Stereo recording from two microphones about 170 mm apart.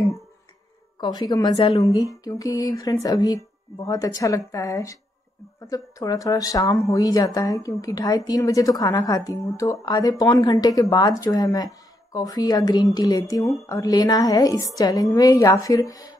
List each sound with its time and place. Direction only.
1.0 s speech: 25° left (ahead or behind)
1.5 s a woman's voice: 35° left (ahead or behind)
1.8 s speech: 20° left (ahead or behind)